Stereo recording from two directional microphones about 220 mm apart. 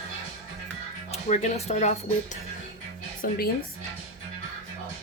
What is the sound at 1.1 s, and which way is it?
Speech, 30° left (ahead or behind).